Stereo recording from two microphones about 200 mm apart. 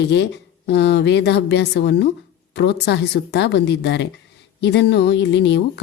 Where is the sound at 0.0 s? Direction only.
60° left (ahead or behind).